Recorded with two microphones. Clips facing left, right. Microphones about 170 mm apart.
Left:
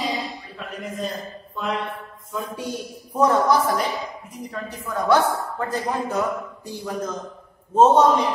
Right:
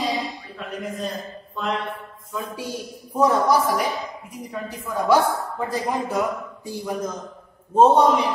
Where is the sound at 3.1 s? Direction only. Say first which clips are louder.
Even; 10° right (ahead or behind).